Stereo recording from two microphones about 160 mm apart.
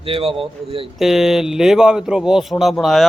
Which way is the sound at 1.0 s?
Centre (ahead or behind).